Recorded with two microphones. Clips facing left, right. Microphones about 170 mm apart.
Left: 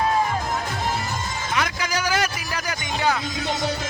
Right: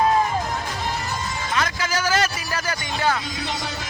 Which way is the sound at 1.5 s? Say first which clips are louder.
Right 1 dB; 15° left (ahead or behind).